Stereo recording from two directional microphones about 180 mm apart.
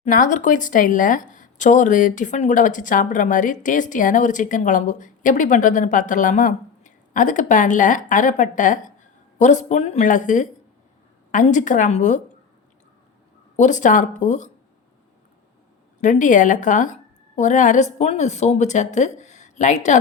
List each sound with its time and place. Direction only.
0.0 s speech: 45° left (ahead or behind)
13.6 s speech: 45° left (ahead or behind)
16.0 s a woman's voice: 45° left (ahead or behind)